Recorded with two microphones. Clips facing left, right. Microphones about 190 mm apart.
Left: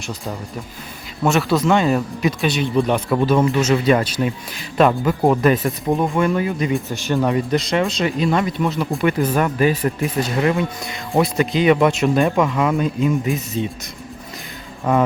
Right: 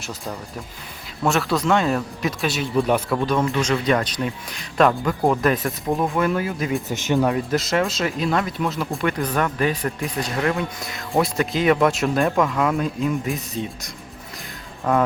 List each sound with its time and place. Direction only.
0.0 s speech: centre (ahead or behind)
6.8 s speech: 20° right (ahead or behind)
7.2 s speech: centre (ahead or behind)